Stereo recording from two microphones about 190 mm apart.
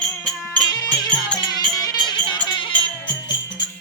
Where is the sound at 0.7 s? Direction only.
20° left (ahead or behind).